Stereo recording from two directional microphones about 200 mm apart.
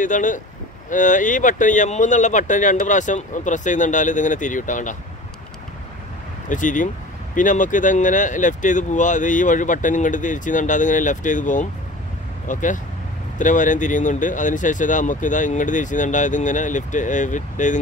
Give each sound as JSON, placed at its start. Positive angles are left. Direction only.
{"t": 0.0, "sound": "speech", "side_deg": 40}
{"t": 6.5, "sound": "speech", "side_deg": 40}